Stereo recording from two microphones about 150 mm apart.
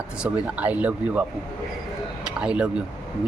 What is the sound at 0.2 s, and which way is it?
Speech, 10° right (ahead or behind).